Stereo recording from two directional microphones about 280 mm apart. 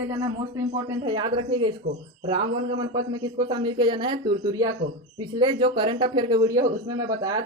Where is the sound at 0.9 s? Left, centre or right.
Centre.